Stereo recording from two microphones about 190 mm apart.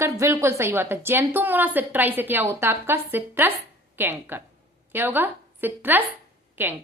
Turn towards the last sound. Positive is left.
turn(degrees=-10)  # may be behind; listen again after turning